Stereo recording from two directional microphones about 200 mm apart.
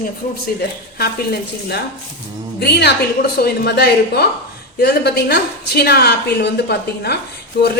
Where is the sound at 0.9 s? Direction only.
50° left (ahead or behind).